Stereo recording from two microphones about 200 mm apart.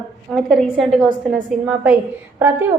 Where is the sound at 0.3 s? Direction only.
Centre (ahead or behind).